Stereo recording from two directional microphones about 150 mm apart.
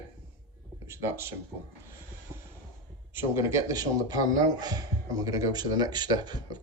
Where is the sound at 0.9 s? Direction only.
15° right (ahead or behind).